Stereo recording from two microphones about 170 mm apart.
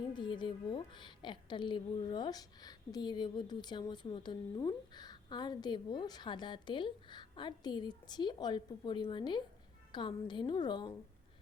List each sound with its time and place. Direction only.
0.1 s a woman's voice: 25° left (ahead or behind)